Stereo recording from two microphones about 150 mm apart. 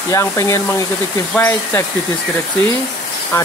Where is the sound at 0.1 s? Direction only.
20° left (ahead or behind).